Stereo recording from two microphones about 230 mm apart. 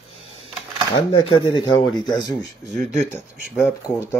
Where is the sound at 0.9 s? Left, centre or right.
Left.